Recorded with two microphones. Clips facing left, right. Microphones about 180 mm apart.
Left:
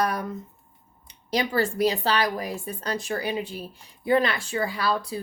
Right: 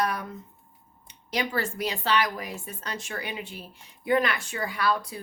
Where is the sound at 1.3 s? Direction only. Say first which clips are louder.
Left 5 dB; 35° left (ahead or behind).